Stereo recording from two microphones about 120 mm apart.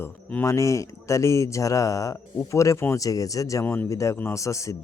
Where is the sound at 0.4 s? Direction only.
25° left (ahead or behind).